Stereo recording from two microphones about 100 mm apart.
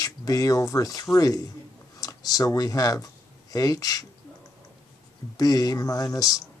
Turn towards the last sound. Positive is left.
turn(degrees=35)  # may be behind; listen again after turning